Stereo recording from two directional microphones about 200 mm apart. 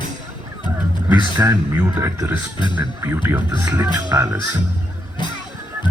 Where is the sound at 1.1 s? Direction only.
10° right (ahead or behind).